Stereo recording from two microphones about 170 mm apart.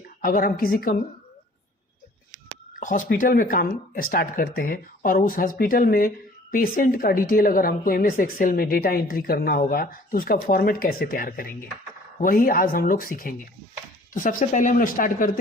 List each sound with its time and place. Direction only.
0.2 s a woman's voice: 55° left (ahead or behind)
2.8 s a woman's voice: 50° left (ahead or behind)